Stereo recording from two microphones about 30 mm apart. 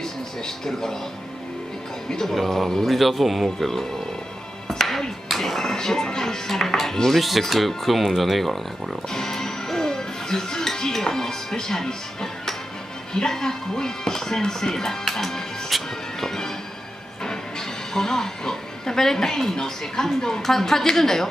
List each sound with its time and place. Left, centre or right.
0.7 s speech: centre
2.2 s speech: centre
4.7 s music: centre
7.2 s speech: centre
9.1 s speech: centre